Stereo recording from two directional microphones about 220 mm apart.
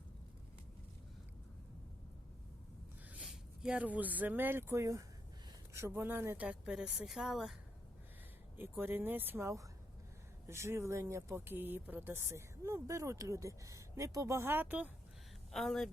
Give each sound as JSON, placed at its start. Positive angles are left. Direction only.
{"t": 3.1, "sound": "speech", "side_deg": -5}
{"t": 8.5, "sound": "speech", "side_deg": -10}